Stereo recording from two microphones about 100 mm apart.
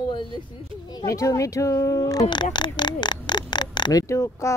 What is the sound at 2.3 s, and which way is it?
Speech, 50° left (ahead or behind).